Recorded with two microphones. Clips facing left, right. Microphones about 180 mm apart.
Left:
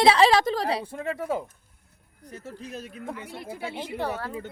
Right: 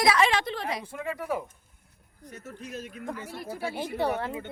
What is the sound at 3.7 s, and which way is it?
Speech, 10° right (ahead or behind).